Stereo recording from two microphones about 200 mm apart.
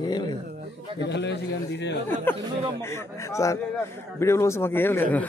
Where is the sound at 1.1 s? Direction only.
60° left (ahead or behind).